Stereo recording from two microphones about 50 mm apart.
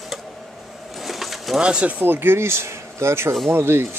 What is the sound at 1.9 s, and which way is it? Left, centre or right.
Speech, right.